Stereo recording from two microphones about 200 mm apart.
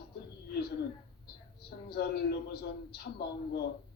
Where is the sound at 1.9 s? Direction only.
55° left (ahead or behind).